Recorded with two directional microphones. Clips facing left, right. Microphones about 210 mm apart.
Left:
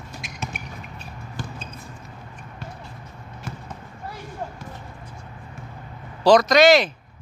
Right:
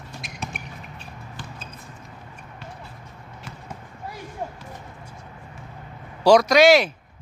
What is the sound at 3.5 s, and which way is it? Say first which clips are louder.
Basketball bounce: left 7 dB; 45° left (ahead or behind).